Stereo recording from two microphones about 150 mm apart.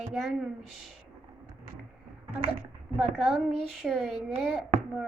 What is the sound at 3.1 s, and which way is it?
Child singing, centre (ahead or behind).